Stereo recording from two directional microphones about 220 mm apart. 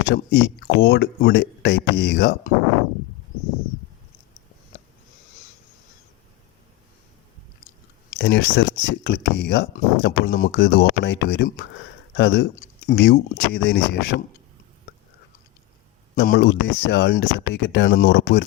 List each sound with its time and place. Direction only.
0.1 s speech: 50° left (ahead or behind)
8.2 s speech: 55° left (ahead or behind)
16.1 s speech: 50° left (ahead or behind)